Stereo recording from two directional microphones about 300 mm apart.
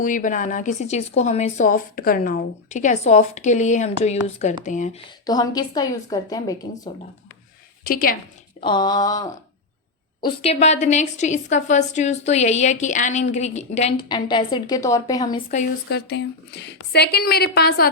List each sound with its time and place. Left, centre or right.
0.0 s a woman's voice: left
7.9 s a woman's voice: left
8.6 s a woman's voice: centre
15.4 s speech: left